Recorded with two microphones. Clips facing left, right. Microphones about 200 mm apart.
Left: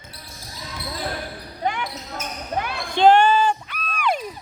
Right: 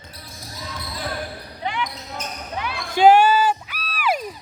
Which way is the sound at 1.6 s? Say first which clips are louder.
Left 2 dB; 45° left (ahead or behind).